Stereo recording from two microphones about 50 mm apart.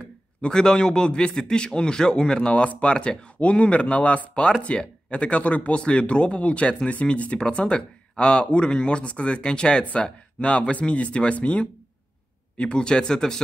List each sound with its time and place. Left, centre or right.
0.0 s a man's voice: centre